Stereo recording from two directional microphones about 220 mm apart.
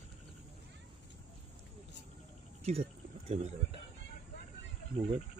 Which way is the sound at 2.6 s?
25° right (ahead or behind).